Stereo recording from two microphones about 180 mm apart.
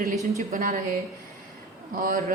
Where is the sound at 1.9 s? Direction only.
50° right (ahead or behind).